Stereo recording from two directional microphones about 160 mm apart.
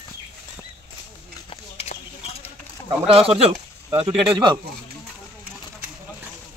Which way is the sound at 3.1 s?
40° right (ahead or behind).